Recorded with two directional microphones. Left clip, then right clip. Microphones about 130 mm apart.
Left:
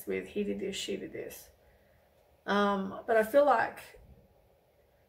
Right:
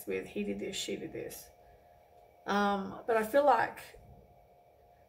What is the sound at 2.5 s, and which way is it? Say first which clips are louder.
Speech: left 2 dB; 15° left (ahead or behind).